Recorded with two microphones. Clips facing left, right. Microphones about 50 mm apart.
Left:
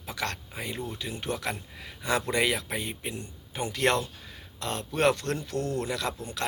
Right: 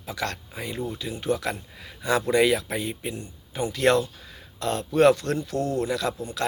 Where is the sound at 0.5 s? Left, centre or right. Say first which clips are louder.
Right 2 dB; left.